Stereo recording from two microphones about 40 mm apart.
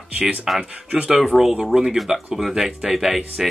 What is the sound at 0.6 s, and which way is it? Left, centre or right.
Speech, right.